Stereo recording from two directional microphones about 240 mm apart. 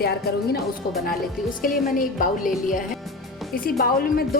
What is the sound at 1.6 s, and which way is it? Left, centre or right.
Speech, left.